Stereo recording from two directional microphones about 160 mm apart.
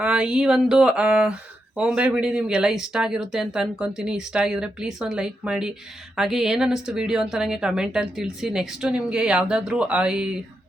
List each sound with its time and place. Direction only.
0.0 s speech: 5° right (ahead or behind)